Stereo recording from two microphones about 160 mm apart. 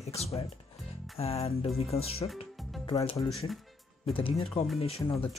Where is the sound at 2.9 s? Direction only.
25° left (ahead or behind).